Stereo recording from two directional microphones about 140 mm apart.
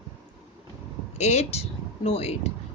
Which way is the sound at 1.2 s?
50° left (ahead or behind).